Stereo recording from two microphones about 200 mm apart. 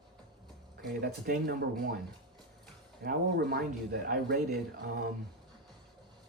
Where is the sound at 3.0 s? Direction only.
50° right (ahead or behind).